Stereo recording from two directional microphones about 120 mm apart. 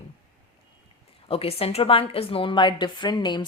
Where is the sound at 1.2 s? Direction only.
50° left (ahead or behind).